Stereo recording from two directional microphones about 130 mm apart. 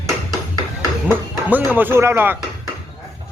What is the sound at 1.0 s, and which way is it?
Speech, 15° right (ahead or behind).